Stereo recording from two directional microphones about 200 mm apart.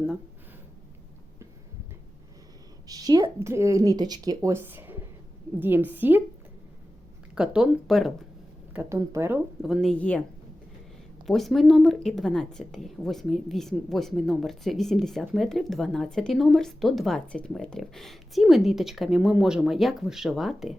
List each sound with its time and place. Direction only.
2.8 s a woman's voice: 20° right (ahead or behind)
7.3 s a woman's voice: 5° right (ahead or behind)
8.7 s a woman's voice: 10° right (ahead or behind)
9.6 s a woman's voice: centre (ahead or behind)
11.3 s a woman's voice: centre (ahead or behind)